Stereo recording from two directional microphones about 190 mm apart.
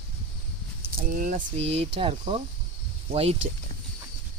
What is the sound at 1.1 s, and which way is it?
Speech, 45° right (ahead or behind).